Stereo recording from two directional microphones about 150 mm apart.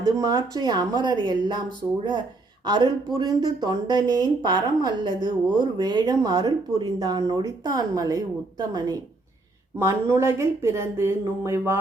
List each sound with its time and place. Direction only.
0.0 s speech: 25° right (ahead or behind)
2.6 s speech: 30° right (ahead or behind)